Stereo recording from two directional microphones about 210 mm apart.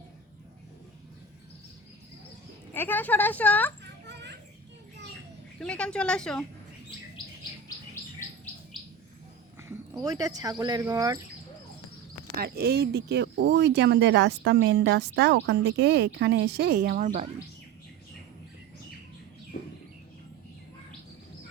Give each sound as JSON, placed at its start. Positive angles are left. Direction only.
{"t": 2.7, "sound": "speech", "side_deg": 10}
{"t": 4.0, "sound": "children playing", "side_deg": -55}
{"t": 5.5, "sound": "a woman's voice", "side_deg": 5}
{"t": 10.0, "sound": "speech", "side_deg": -15}
{"t": 12.4, "sound": "speech", "side_deg": -50}